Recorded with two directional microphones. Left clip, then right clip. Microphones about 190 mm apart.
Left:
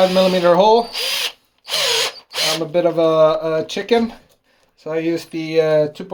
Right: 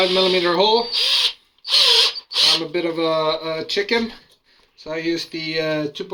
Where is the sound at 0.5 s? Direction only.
35° left (ahead or behind).